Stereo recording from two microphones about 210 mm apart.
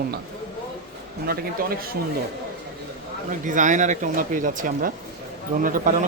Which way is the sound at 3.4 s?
35° right (ahead or behind).